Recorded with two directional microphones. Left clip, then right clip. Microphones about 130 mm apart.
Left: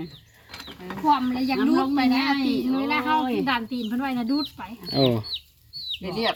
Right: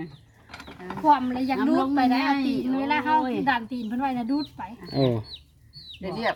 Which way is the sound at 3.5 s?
30° right (ahead or behind).